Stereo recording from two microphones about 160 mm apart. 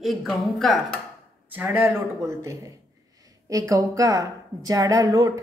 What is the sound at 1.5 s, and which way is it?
A woman's voice, 10° right (ahead or behind).